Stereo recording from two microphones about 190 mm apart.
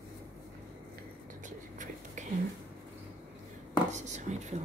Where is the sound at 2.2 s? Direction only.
40° right (ahead or behind).